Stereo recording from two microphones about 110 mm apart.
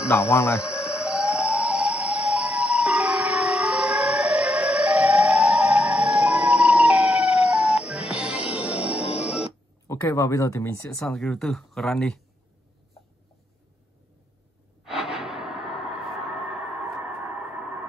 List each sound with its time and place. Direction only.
0.1 s speech: 25° left (ahead or behind)
0.6 s siren: 10° right (ahead or behind)
9.8 s speech: 30° left (ahead or behind)
11.0 s speech: 5° left (ahead or behind)
14.9 s music: 5° right (ahead or behind)